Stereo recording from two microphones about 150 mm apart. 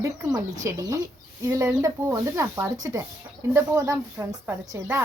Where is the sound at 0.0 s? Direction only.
20° right (ahead or behind).